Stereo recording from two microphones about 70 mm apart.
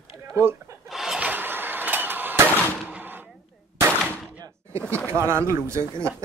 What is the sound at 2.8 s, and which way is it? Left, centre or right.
Gunshot, right.